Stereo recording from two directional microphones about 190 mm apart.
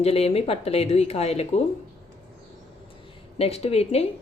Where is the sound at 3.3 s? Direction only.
30° left (ahead or behind).